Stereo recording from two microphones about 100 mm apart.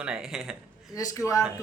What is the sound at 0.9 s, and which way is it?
Speech, 30° left (ahead or behind).